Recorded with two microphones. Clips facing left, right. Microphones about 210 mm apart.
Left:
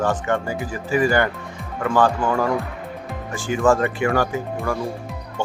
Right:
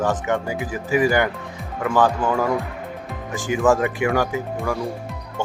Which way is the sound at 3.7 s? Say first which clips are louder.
Even; 5° right (ahead or behind).